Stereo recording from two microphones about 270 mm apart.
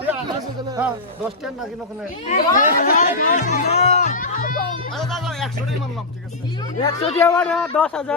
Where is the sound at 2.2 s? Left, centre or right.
Left.